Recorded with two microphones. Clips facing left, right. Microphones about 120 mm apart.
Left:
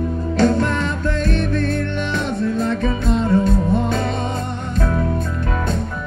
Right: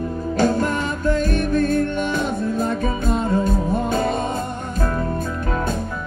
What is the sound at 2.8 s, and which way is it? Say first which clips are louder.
Music: left 2 dB; 50° right (ahead or behind).